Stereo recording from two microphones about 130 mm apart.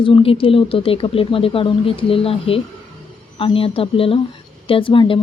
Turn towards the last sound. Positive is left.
turn(degrees=40)  # may be behind; listen again after turning